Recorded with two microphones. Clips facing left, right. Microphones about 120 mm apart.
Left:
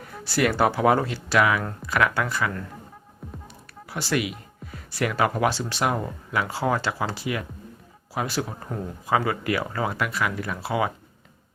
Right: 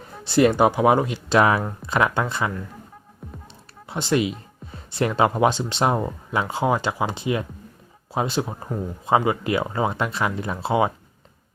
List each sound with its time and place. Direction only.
0.3 s speech: 25° right (ahead or behind)
1.4 s speech: 35° right (ahead or behind)